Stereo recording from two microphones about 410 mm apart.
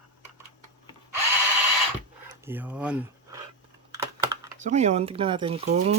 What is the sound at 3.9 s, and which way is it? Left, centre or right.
Speech, centre.